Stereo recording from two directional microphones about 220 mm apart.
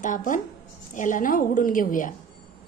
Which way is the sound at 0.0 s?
35° left (ahead or behind).